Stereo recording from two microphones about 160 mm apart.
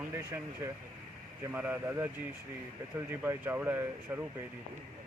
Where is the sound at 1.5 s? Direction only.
10° right (ahead or behind).